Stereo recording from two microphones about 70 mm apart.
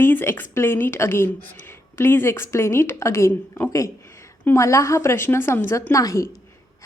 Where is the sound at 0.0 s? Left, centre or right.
Left.